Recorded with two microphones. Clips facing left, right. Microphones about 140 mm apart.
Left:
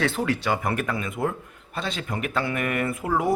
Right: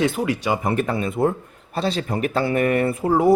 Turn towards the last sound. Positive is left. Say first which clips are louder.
# right 7 dB
turn(degrees=-30)  # may be behind; listen again after turning